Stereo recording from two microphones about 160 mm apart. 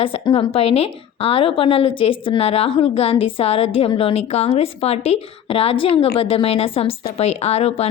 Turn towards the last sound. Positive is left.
turn(degrees=40)  # may be behind; listen again after turning